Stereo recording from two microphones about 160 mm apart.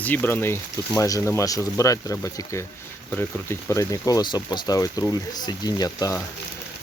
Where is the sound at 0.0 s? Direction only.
10° left (ahead or behind).